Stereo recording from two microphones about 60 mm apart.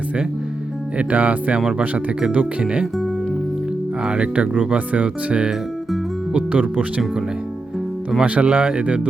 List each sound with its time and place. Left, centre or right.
0.9 s speech: right
4.0 s speech: centre
8.2 s speech: centre